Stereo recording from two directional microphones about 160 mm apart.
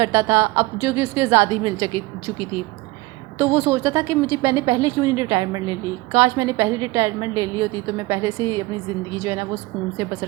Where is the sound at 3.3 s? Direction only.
15° right (ahead or behind).